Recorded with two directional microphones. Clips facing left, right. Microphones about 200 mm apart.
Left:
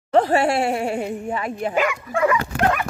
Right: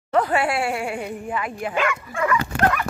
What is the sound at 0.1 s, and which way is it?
Speech, 30° left (ahead or behind).